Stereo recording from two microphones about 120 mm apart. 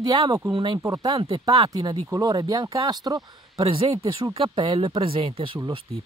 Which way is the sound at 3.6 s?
50° right (ahead or behind).